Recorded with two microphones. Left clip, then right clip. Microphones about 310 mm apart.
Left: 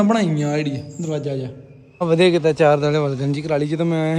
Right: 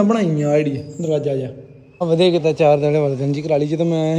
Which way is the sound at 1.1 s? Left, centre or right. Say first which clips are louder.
Right 5 dB; centre.